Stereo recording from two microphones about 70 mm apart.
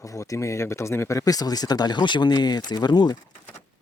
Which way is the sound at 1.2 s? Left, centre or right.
Left.